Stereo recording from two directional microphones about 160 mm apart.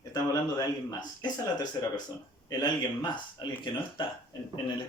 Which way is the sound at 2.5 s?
25° left (ahead or behind).